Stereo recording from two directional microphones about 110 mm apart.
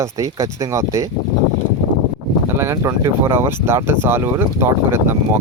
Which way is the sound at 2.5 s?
20° right (ahead or behind).